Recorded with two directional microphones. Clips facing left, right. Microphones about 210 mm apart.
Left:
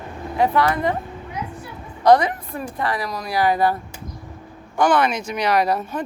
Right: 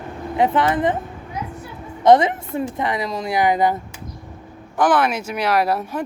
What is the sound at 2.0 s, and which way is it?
Speech, 25° right (ahead or behind).